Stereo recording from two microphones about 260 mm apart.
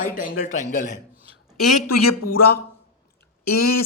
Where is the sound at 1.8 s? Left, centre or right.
Left.